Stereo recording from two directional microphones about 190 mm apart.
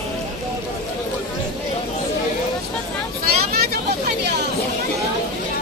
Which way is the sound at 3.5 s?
55° right (ahead or behind).